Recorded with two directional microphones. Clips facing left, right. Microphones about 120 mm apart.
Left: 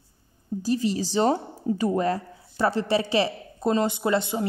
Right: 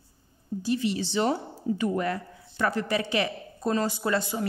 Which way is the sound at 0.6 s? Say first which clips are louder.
Left 2 dB; 35° left (ahead or behind).